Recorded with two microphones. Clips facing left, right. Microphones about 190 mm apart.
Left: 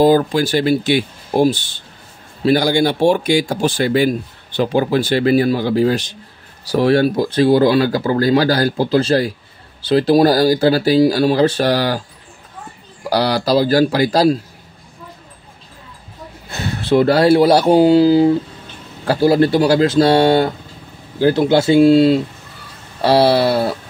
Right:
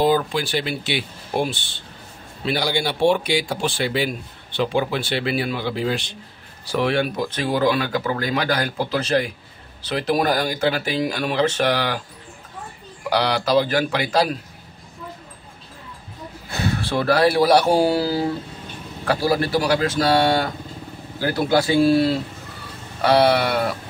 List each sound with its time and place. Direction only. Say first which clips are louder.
0.0 s speech: left 7 dB; 40° left (ahead or behind)
13.1 s speech: left 3 dB; 35° left (ahead or behind)
16.8 s speech: left 7 dB; 25° left (ahead or behind)